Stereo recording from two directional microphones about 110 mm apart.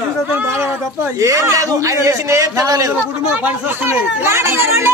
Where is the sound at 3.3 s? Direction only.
15° right (ahead or behind).